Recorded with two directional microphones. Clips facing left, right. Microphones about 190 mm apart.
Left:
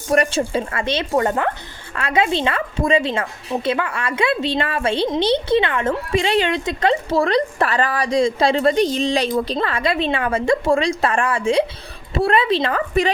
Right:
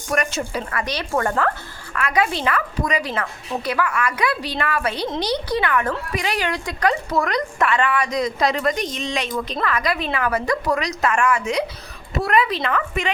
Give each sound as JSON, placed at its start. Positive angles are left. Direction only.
{"t": 0.1, "sound": "speech", "side_deg": 30}